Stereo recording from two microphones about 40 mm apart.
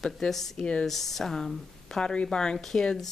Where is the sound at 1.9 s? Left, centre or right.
Left.